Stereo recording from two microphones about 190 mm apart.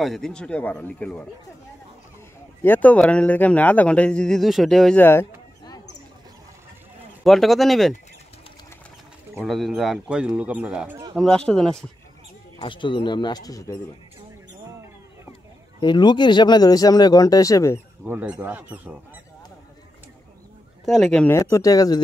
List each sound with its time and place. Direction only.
0.0 s speech: centre (ahead or behind)
2.6 s speech: 10° left (ahead or behind)
7.2 s speech: centre (ahead or behind)
9.3 s speech: centre (ahead or behind)
12.5 s speech: 25° left (ahead or behind)
15.8 s speech: 25° left (ahead or behind)
18.0 s speech: 10° right (ahead or behind)
20.8 s speech: 5° left (ahead or behind); by 22.0 s 20° left (ahead or behind)